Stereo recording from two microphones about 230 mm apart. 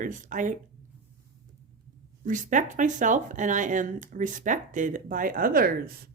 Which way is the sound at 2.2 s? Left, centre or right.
Right.